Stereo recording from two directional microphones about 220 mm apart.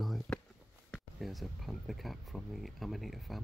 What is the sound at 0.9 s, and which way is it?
Speech, centre (ahead or behind).